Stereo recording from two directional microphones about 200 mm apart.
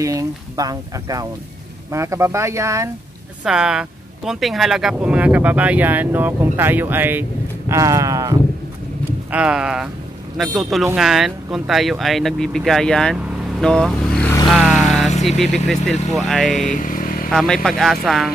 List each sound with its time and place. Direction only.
0.0 s speech: 15° right (ahead or behind)
3.4 s speech: 5° right (ahead or behind)
9.3 s speech: 5° right (ahead or behind)
14.5 s vehicle: centre (ahead or behind)
15.2 s speech: centre (ahead or behind)
16.6 s vehicle: 40° left (ahead or behind)
17.3 s speech: 5° left (ahead or behind)